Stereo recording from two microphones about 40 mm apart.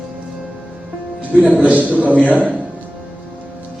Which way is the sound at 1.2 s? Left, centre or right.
Right.